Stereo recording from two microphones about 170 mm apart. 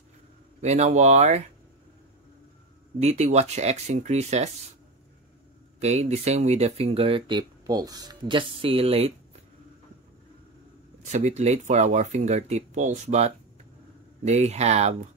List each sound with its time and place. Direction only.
0.6 s speech: 40° right (ahead or behind)
3.0 s speech: 40° right (ahead or behind)
5.8 s speech: 40° right (ahead or behind)
11.0 s speech: 45° right (ahead or behind)